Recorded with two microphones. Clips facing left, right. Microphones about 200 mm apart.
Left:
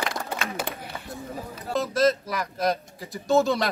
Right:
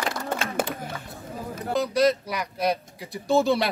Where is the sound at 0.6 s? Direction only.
55° right (ahead or behind).